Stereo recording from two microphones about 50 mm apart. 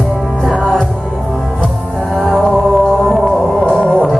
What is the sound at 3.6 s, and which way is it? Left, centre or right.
Music, centre.